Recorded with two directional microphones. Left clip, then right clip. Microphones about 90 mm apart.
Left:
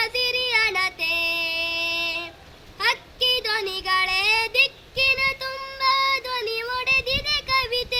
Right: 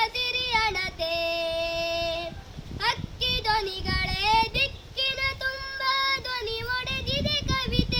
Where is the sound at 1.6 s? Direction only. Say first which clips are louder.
Left 3 dB; 55° left (ahead or behind).